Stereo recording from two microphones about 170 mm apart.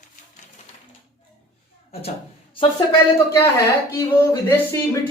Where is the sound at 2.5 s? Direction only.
30° left (ahead or behind).